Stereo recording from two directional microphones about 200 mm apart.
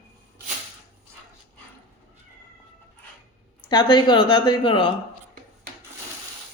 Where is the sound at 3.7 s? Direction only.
25° left (ahead or behind).